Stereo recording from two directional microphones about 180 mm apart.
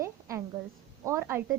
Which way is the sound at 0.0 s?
15° right (ahead or behind).